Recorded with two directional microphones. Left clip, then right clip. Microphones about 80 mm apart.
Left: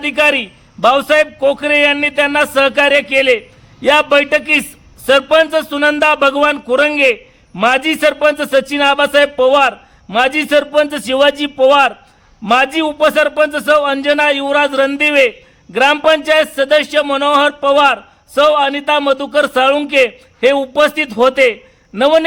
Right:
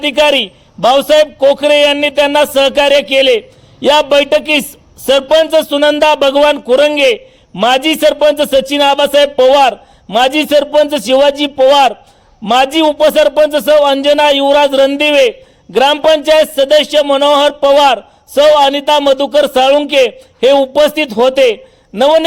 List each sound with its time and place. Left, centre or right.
0.0 s a man's voice: right